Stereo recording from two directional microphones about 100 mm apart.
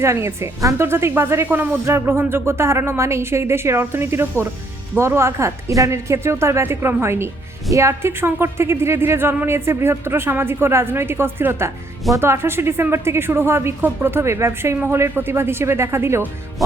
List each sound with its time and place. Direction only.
0.0 s speech: 30° right (ahead or behind)